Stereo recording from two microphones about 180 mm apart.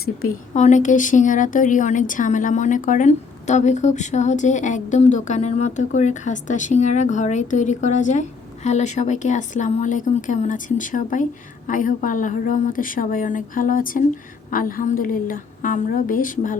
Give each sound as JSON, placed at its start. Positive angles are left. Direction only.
{"t": 0.5, "sound": "a woman's voice", "side_deg": 40}